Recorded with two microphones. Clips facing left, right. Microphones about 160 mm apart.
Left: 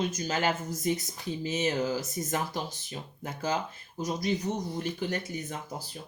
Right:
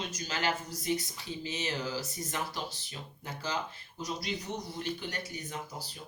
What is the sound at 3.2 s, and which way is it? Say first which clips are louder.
Speech: left 5 dB; 45° left (ahead or behind).